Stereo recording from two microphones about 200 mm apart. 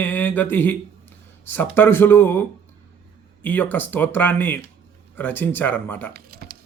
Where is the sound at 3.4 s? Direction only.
10° left (ahead or behind).